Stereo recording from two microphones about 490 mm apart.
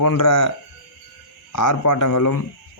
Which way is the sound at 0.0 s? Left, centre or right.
Left.